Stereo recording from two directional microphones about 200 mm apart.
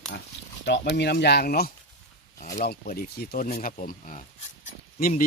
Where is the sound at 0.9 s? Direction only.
55° left (ahead or behind).